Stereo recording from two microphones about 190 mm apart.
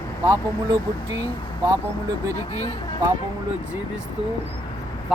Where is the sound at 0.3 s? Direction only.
20° right (ahead or behind).